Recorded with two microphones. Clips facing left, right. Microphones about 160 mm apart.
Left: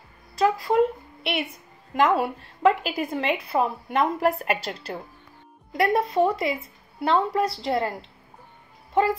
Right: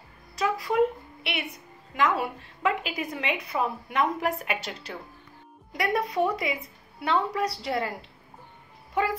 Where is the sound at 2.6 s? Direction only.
40° left (ahead or behind).